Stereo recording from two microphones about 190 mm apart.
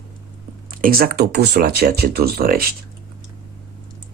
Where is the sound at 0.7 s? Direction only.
50° right (ahead or behind).